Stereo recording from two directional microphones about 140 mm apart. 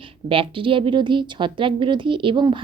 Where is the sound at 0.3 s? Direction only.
40° right (ahead or behind).